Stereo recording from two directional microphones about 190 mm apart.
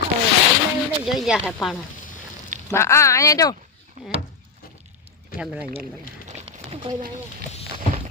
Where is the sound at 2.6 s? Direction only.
15° left (ahead or behind).